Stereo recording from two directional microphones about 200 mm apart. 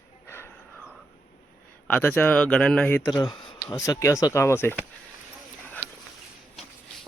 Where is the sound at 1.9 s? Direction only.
10° left (ahead or behind).